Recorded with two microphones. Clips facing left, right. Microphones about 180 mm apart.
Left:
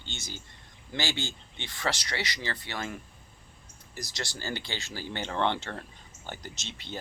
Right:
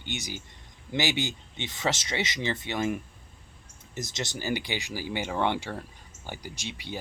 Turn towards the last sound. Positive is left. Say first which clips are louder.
# right 3 dB
turn(degrees=-10)  # may be behind; listen again after turning